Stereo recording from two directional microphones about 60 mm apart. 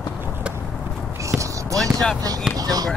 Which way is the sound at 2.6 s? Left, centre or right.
Right.